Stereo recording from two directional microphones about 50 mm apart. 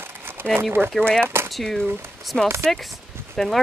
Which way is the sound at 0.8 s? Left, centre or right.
Centre.